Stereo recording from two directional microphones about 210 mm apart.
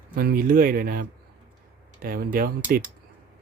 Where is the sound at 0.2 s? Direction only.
45° right (ahead or behind).